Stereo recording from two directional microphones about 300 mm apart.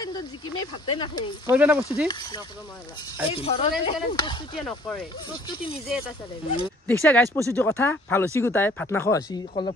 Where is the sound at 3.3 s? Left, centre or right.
Centre.